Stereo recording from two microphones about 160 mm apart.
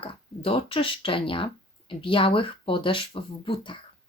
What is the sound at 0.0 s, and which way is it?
Speech, 35° left (ahead or behind).